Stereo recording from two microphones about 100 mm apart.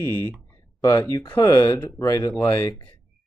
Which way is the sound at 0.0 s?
25° left (ahead or behind).